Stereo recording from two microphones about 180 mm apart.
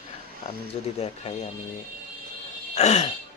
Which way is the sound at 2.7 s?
40° left (ahead or behind).